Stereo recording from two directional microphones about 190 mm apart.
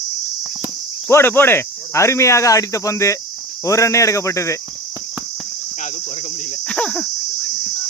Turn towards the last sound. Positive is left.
turn(degrees=5)  # may be behind; listen again after turning